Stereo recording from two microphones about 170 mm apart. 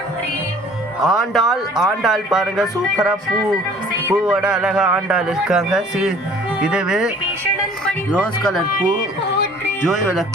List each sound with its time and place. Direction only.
1.0 s a man's voice: centre (ahead or behind)
4.1 s a man's voice: 5° right (ahead or behind)
8.1 s a man's voice: 5° left (ahead or behind)